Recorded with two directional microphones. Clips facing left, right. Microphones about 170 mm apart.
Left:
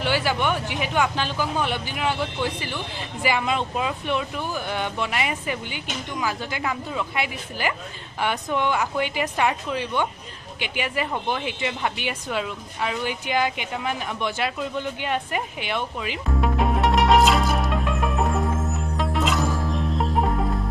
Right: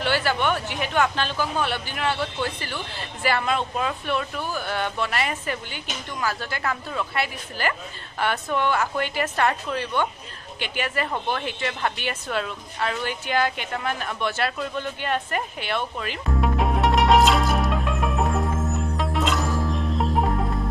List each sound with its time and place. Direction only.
0.0 s speech: 10° left (ahead or behind)
16.3 s music: centre (ahead or behind)